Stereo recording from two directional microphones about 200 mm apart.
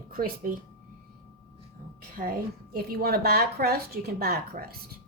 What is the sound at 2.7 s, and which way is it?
A woman's voice, 50° right (ahead or behind).